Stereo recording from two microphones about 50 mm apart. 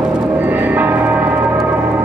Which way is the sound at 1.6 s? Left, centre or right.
Right.